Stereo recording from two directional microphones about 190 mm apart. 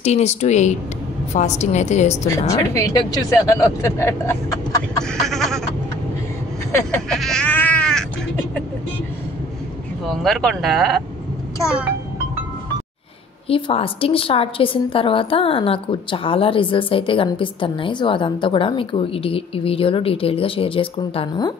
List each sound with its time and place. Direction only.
0.0 s a woman's voice: 35° left (ahead or behind)
2.2 s speech: 15° left (ahead or behind)
5.2 s a sound: centre (ahead or behind)
7.1 s a sound: 5° left (ahead or behind)
10.0 s speech: centre (ahead or behind)
13.5 s a woman's voice: 30° left (ahead or behind)